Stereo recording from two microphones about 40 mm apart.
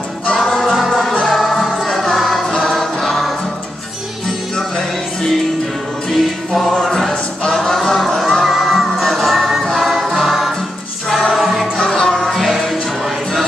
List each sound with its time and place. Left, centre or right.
0.4 s music: centre
4.6 s music: centre
6.0 s music: centre
11.8 s music: centre
12.3 s music: centre